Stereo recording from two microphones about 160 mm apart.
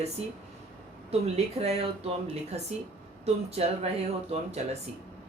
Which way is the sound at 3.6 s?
40° right (ahead or behind).